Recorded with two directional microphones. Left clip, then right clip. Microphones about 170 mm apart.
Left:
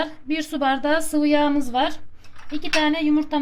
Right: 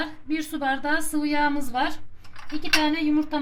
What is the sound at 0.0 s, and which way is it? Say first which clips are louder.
A woman's voice: left 3 dB; 40° left (ahead or behind).